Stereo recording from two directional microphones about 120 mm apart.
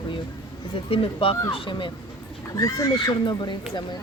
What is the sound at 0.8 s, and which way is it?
Speech, 50° left (ahead or behind).